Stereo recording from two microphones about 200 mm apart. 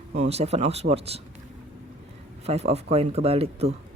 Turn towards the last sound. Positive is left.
turn(degrees=-30)  # may be behind; listen again after turning